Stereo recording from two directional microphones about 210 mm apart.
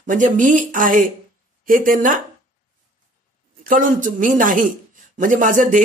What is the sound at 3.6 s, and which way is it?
Speech, 40° right (ahead or behind).